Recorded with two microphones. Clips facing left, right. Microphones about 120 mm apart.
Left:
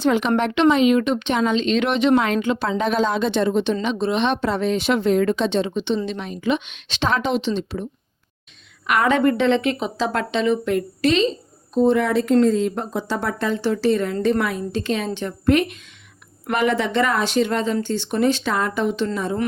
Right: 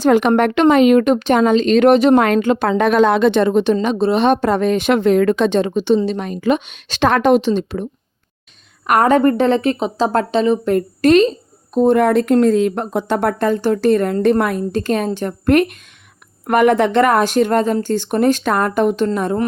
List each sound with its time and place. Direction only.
0.0 s a woman's voice: 50° right (ahead or behind)
8.9 s a woman's voice: 45° right (ahead or behind)